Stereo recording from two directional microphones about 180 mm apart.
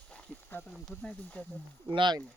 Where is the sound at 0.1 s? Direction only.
5° left (ahead or behind).